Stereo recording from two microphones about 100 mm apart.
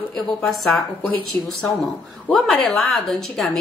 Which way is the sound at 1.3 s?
20° left (ahead or behind).